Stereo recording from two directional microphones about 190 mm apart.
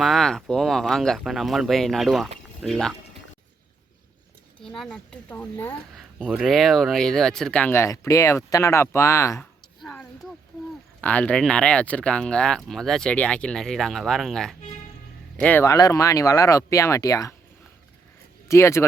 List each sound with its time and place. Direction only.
0.0 s speech: centre (ahead or behind)
4.6 s speech: centre (ahead or behind)
6.1 s speech: 5° right (ahead or behind); by 9.4 s 15° left (ahead or behind)
9.4 s a sound: 5° left (ahead or behind)
11.0 s speech: 5° left (ahead or behind)
18.4 s speech: 15° left (ahead or behind)